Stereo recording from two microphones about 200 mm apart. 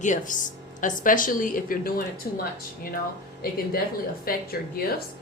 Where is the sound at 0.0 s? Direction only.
40° left (ahead or behind).